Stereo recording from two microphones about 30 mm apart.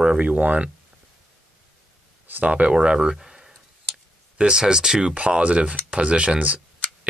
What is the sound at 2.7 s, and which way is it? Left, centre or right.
Speech, right.